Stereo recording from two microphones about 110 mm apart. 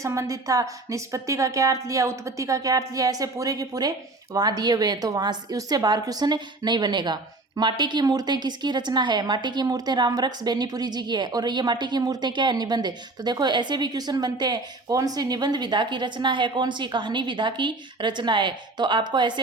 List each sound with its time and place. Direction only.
0.0 s a woman's voice: 25° right (ahead or behind); by 19.3 s 45° right (ahead or behind)